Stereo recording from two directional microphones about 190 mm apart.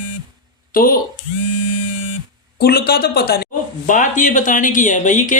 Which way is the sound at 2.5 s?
55° left (ahead or behind).